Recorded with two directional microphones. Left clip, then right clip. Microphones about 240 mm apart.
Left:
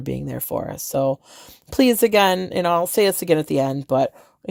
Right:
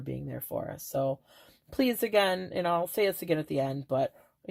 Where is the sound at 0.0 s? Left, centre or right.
Left.